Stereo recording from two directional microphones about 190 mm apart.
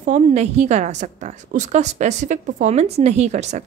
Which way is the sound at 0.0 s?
35° right (ahead or behind).